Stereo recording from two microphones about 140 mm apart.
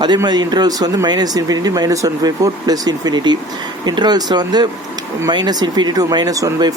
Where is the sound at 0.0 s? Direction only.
30° right (ahead or behind).